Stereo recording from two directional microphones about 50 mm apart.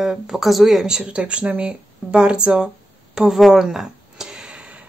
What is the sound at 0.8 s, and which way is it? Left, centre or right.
A woman's voice, centre.